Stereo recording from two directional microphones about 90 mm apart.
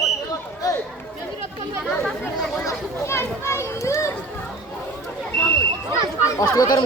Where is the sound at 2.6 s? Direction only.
30° left (ahead or behind).